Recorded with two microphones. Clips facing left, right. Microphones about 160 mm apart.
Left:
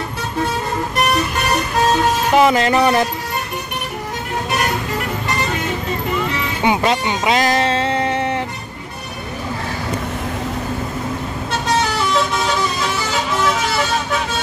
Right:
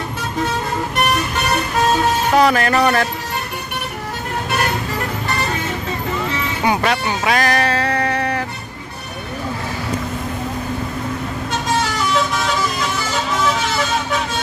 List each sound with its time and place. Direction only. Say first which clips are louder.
2.3 s speech: left 2 dB; 20° left (ahead or behind)
6.6 s speech: left 2 dB; 20° left (ahead or behind)